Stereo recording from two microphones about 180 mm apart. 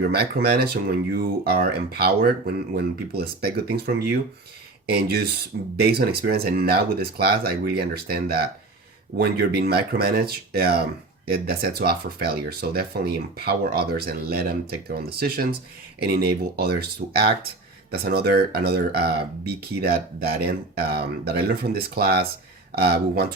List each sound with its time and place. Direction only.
0.0 s speech: 60° right (ahead or behind)